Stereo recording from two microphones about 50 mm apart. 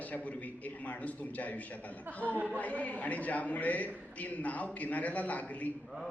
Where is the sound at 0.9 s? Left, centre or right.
Left.